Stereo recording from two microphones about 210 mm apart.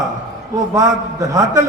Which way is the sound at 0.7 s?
15° right (ahead or behind).